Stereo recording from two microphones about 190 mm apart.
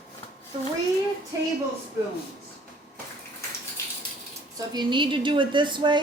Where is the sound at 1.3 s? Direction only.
15° right (ahead or behind).